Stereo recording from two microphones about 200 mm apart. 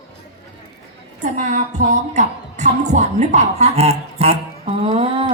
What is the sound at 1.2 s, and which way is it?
Speech, 40° right (ahead or behind).